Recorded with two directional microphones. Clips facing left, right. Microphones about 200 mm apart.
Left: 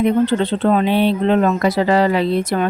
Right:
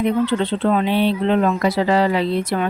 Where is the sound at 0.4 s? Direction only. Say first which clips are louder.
Left 2 dB; 45° left (ahead or behind).